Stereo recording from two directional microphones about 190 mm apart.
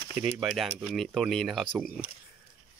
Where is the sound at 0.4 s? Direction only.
Centre (ahead or behind).